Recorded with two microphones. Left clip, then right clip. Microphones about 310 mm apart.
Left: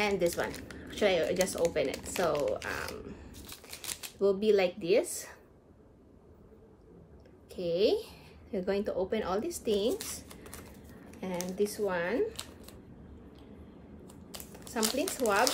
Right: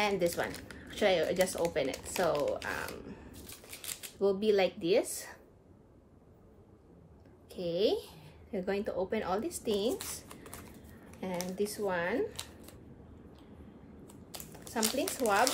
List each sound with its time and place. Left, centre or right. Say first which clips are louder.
0.2 s speech: left 1 dB; centre
3.4 s typewriter: left 3 dB; centre
4.2 s speech: left 2 dB; centre
7.4 s speech: left 2 dB; centre
10.1 s typing: left 1 dB; centre
11.1 s speech: left 1 dB; centre
14.0 s a sound: even; centre